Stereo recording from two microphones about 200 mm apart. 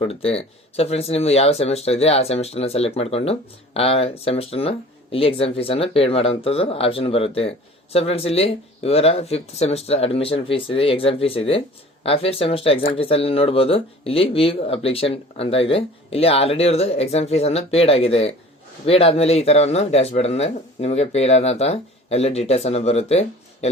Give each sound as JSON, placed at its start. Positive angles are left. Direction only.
{"t": 0.0, "sound": "speech", "side_deg": 30}